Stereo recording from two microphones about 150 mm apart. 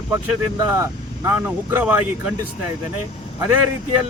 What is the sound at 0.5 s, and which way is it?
Speech, 20° right (ahead or behind).